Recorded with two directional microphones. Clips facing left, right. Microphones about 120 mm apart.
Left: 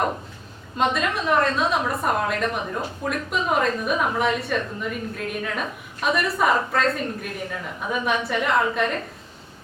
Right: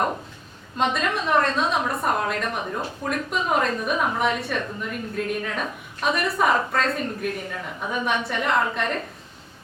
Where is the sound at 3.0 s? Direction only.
Centre (ahead or behind).